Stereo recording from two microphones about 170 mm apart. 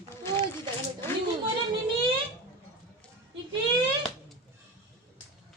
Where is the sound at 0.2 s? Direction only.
15° left (ahead or behind).